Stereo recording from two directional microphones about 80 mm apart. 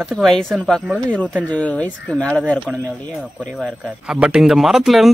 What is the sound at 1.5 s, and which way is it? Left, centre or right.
Speech, centre.